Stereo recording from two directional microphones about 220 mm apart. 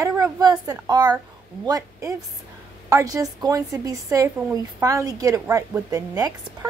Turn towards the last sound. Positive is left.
turn(degrees=-15)  # may be behind; listen again after turning